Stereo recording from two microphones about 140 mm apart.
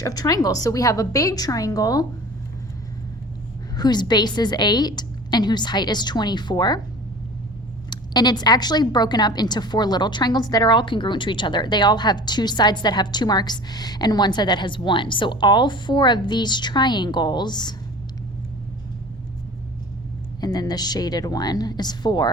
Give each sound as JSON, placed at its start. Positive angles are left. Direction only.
{"t": 0.0, "sound": "a woman's voice", "side_deg": 25}
{"t": 3.8, "sound": "a woman's voice", "side_deg": 30}
{"t": 7.9, "sound": "a woman's voice", "side_deg": 30}
{"t": 20.4, "sound": "a woman's voice", "side_deg": 30}